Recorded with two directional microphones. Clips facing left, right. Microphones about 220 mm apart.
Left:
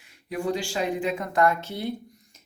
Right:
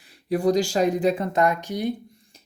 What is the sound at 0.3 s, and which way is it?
Speech, 35° right (ahead or behind).